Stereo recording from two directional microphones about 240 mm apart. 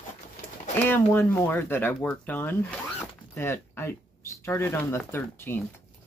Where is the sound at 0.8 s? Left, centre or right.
Centre.